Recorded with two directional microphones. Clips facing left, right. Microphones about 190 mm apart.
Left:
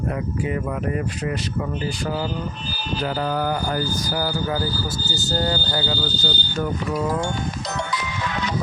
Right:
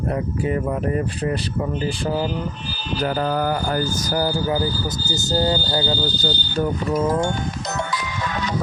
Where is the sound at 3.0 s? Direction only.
50° right (ahead or behind).